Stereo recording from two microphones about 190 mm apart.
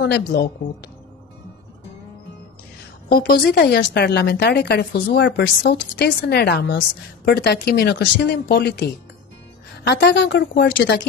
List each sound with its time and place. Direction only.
0.0 s a woman's voice: 55° left (ahead or behind)
3.1 s a woman's voice: 50° left (ahead or behind); by 11.0 s 65° left (ahead or behind)